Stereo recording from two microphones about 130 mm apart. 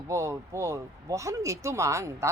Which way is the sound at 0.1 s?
25° right (ahead or behind).